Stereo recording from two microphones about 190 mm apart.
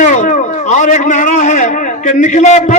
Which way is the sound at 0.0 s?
40° left (ahead or behind).